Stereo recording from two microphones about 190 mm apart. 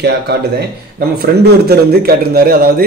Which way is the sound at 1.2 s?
55° right (ahead or behind).